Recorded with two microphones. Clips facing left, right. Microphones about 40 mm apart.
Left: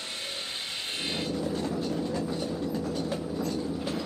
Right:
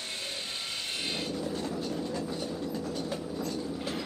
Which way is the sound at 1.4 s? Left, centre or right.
Left.